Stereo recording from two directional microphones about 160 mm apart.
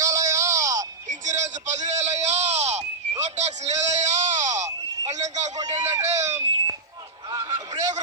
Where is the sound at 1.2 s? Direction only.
50° right (ahead or behind).